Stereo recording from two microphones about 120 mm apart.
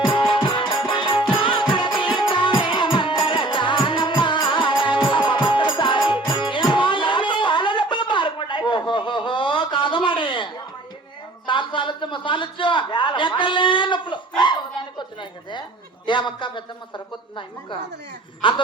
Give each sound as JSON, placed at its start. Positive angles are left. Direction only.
{"t": 0.0, "sound": "music", "side_deg": 45}
{"t": 11.4, "sound": "a sound", "side_deg": 40}
{"t": 18.4, "sound": "speech", "side_deg": 45}